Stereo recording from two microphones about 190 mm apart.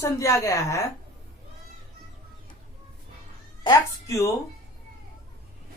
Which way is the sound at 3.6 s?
15° left (ahead or behind).